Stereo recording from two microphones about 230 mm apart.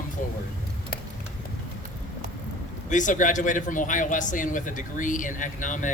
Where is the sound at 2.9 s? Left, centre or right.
Left.